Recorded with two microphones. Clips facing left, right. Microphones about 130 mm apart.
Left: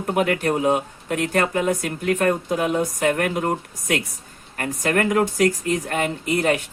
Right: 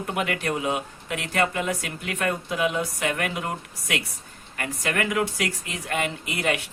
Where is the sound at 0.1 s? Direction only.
45° left (ahead or behind).